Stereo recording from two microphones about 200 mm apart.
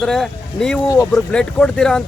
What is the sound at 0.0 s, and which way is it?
Speech, 5° left (ahead or behind).